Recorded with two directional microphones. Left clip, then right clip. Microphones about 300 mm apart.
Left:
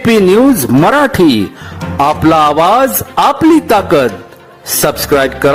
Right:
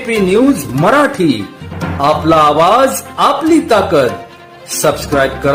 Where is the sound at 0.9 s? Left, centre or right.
Left.